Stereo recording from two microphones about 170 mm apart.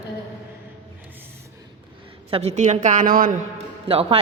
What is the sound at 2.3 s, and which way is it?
A woman's voice, 40° right (ahead or behind).